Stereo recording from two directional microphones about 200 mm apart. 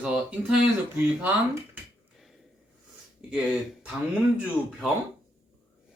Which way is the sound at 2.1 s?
Centre (ahead or behind).